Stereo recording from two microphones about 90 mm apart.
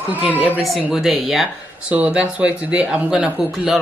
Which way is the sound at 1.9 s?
15° right (ahead or behind).